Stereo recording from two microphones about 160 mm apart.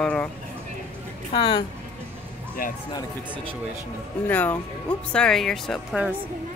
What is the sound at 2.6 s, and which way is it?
Speech, 60° left (ahead or behind).